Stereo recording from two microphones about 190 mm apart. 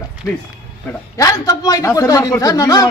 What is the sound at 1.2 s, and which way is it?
Speech, 20° left (ahead or behind).